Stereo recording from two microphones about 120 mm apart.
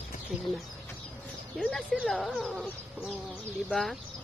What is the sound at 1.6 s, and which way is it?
Speech, 5° left (ahead or behind).